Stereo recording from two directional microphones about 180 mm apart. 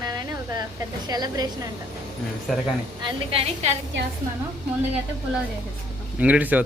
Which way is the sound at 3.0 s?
25° right (ahead or behind).